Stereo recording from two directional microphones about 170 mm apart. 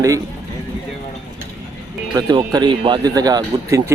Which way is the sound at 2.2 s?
25° right (ahead or behind).